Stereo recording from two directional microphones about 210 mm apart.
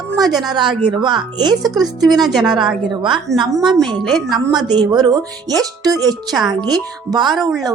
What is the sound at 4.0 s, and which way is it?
Speech, centre (ahead or behind).